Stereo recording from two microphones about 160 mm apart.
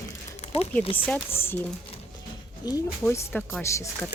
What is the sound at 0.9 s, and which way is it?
Speech, 10° left (ahead or behind).